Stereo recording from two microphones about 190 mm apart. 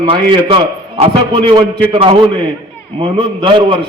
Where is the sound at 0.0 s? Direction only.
30° right (ahead or behind).